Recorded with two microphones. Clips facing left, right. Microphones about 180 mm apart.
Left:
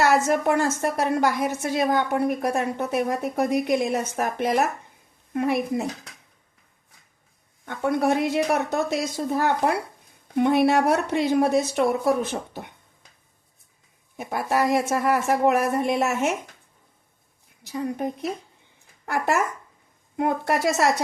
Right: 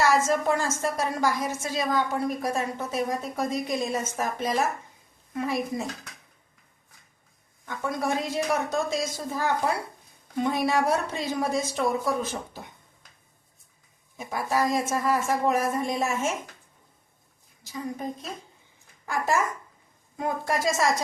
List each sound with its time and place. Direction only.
0.0 s a woman's voice: 65° left (ahead or behind)
7.6 s a woman's voice: 60° left (ahead or behind)
14.2 s a woman's voice: 65° left (ahead or behind)
17.6 s a woman's voice: 65° left (ahead or behind)